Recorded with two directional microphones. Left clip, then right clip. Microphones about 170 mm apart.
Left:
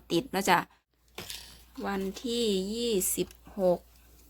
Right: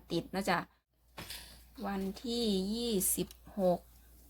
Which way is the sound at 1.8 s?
20° left (ahead or behind).